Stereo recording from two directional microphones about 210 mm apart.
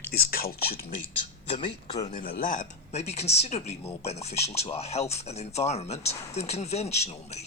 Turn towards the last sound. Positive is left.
turn(degrees=30)  # may be behind; listen again after turning